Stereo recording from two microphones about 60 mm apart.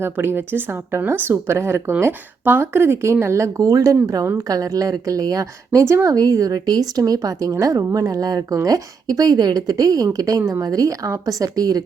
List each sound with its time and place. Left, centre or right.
0.0 s a woman's voice: right
4.4 s speech: right
5.8 s speech: right
7.6 s speech: right